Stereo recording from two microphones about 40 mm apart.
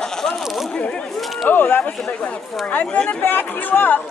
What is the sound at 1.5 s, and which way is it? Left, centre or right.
Speech, left.